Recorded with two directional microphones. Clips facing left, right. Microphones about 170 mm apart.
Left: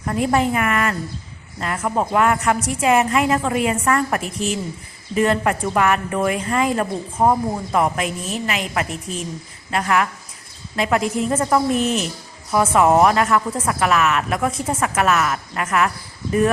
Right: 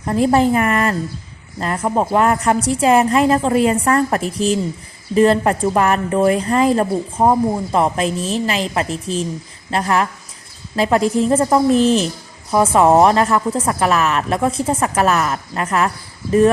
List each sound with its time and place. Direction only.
0.0 s a woman's voice: 30° right (ahead or behind)